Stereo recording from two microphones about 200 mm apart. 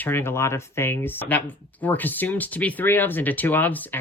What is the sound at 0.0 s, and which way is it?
Speech, 10° left (ahead or behind).